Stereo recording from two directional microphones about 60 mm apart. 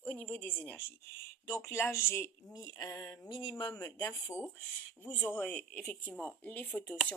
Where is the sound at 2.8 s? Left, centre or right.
Left.